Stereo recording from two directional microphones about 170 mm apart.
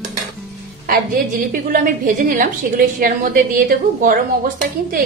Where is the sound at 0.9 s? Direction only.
55° right (ahead or behind).